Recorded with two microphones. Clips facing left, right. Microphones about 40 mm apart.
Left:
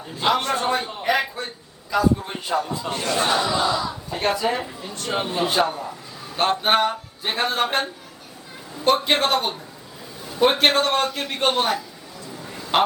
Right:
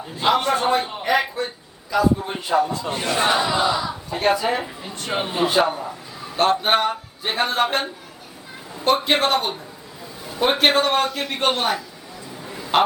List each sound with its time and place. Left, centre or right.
0.0 s a man's voice: centre
2.9 s speech: centre
4.1 s a man's voice: centre
12.4 s a sound: centre